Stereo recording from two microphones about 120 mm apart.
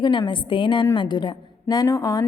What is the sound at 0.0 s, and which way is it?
A woman's voice, 40° left (ahead or behind).